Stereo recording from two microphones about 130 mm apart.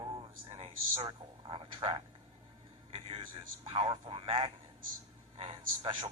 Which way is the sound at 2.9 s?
50° right (ahead or behind).